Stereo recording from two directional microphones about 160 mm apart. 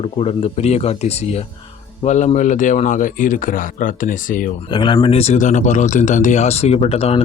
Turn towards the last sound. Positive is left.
turn(degrees=40)  # may be behind; listen again after turning